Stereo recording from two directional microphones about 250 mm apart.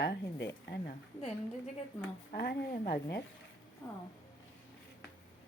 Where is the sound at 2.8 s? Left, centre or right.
Left.